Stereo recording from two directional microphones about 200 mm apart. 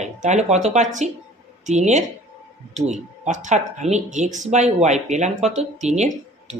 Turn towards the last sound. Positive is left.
turn(degrees=-35)  # may be behind; listen again after turning